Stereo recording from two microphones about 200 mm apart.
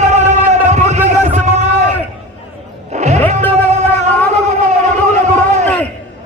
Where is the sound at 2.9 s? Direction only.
35° right (ahead or behind).